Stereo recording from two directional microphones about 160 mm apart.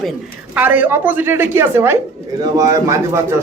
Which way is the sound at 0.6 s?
10° right (ahead or behind).